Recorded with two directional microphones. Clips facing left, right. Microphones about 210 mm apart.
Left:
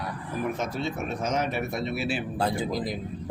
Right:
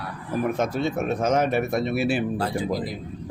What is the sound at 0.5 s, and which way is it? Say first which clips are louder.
Speech: right 6 dB; 55° right (ahead or behind).